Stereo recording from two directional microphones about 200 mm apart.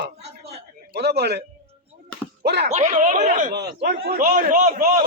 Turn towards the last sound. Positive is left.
turn(degrees=-40)  # may be behind; listen again after turning